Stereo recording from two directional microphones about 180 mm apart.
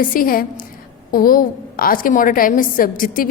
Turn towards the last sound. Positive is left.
turn(degrees=50)  # may be behind; listen again after turning